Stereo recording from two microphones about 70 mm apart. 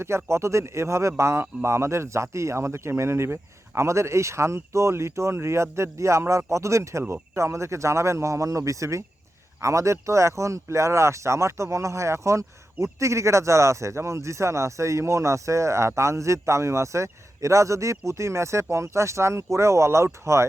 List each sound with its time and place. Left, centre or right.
0.3 s speech: right